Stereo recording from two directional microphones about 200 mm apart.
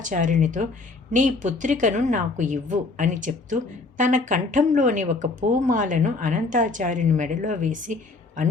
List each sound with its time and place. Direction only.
0.0 s a woman's voice: 40° right (ahead or behind)